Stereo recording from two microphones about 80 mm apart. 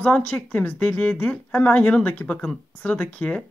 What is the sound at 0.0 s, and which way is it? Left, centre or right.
Speech, centre.